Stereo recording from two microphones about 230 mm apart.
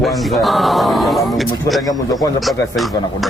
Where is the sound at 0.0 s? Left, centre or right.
Centre.